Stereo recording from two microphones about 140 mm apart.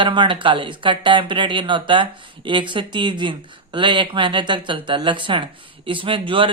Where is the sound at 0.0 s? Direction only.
35° right (ahead or behind).